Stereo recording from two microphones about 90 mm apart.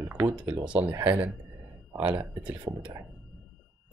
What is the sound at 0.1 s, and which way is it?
Speech, 15° right (ahead or behind).